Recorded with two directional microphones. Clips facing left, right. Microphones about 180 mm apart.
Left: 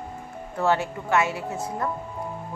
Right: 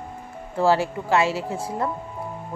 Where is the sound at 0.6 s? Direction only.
30° right (ahead or behind).